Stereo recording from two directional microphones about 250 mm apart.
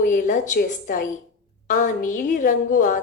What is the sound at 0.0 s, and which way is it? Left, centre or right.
A woman's voice, left.